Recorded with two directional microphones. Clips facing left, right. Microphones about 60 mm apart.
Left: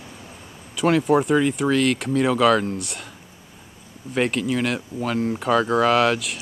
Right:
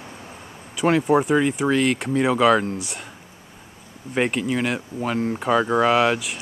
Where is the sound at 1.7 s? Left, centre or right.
Centre.